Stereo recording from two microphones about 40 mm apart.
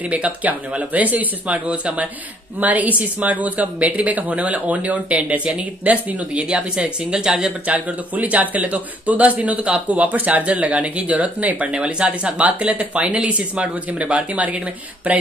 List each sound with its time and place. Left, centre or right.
0.1 s a man's voice: right
1.7 s speech: right
2.6 s a man's voice: right; by 7.5 s centre
7.6 s a man's voice: right